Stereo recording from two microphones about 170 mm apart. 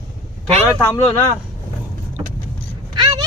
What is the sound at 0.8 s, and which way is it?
Speech, 20° left (ahead or behind).